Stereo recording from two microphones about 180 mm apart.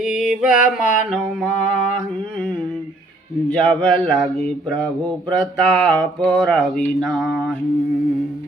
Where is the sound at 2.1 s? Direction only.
5° left (ahead or behind).